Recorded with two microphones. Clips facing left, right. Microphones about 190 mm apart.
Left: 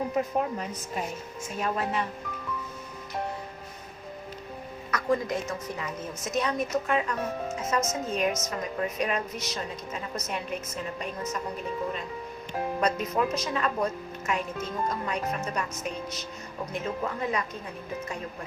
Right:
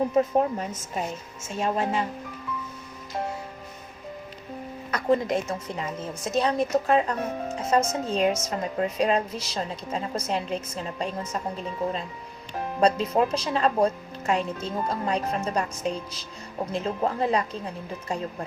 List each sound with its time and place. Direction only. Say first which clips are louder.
0.2 s a woman's voice: right 6 dB; 25° right (ahead or behind)
4.9 s a woman's voice: right 4 dB; 25° right (ahead or behind)
12.8 s speech: right 6 dB; 30° right (ahead or behind)